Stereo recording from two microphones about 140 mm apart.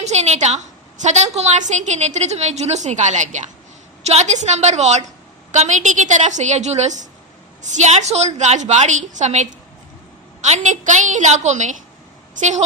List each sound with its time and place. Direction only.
0.0 s a woman's voice: 55° right (ahead or behind)